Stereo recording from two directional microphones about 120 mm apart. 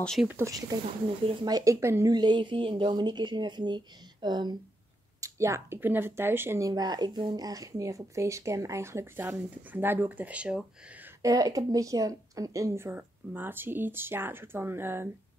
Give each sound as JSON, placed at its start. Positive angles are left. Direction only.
{"t": 0.0, "sound": "speech", "side_deg": 5}
{"t": 0.5, "sound": "speech", "side_deg": -30}
{"t": 2.1, "sound": "speech", "side_deg": -40}
{"t": 5.2, "sound": "speech", "side_deg": -25}
{"t": 6.7, "sound": "speech", "side_deg": -35}
{"t": 11.2, "sound": "speech", "side_deg": -30}